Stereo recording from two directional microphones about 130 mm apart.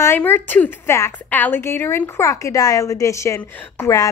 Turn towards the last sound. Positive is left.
turn(degrees=20)  # may be behind; listen again after turning